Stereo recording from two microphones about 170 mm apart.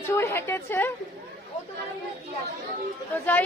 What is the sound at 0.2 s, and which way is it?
Speech, 15° left (ahead or behind).